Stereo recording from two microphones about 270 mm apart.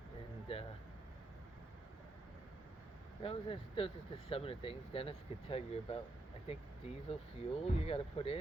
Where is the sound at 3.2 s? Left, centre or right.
Centre.